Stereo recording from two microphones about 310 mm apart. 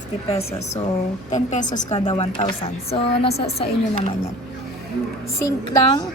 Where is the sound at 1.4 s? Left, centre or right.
Left.